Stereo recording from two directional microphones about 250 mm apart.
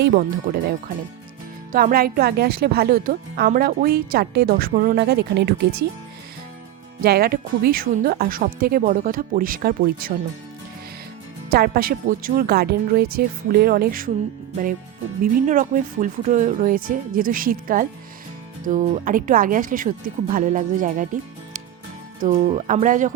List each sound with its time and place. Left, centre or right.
0.0 s speech: right
1.7 s speech: right
7.0 s speech: right
11.5 s speech: right
15.2 s speech: right